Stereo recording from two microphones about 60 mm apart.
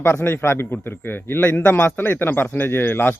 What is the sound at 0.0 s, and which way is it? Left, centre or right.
A man's voice, left.